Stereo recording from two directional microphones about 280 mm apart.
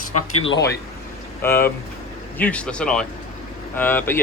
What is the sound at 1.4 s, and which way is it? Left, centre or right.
Speech, centre.